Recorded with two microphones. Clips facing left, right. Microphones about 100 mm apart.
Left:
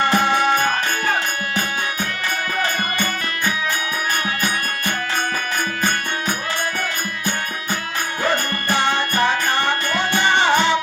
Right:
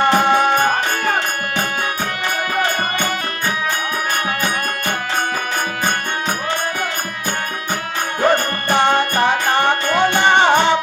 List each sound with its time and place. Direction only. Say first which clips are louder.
0.1 s music: right 3 dB; 50° right (ahead or behind)
8.2 s music: right 6 dB; 50° right (ahead or behind)